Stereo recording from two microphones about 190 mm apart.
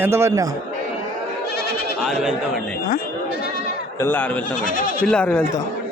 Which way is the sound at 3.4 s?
50° left (ahead or behind).